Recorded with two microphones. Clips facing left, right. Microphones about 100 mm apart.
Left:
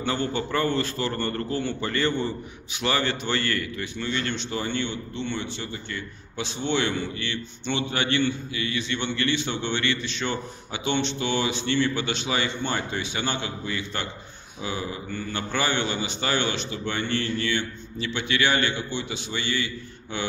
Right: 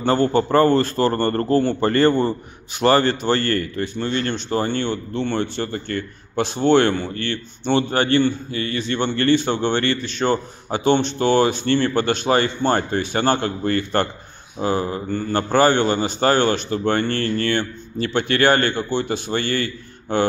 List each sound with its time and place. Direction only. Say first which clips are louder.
0.0 s a man's voice: right 9 dB; 40° right (ahead or behind)